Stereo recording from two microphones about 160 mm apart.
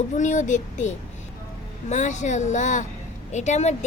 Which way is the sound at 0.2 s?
50° left (ahead or behind).